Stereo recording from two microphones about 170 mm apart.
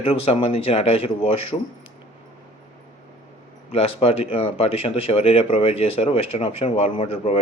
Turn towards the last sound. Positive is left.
turn(degrees=35)  # may be behind; listen again after turning